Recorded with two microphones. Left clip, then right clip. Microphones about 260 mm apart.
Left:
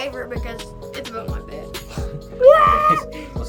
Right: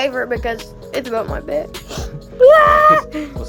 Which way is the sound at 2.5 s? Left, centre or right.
Right.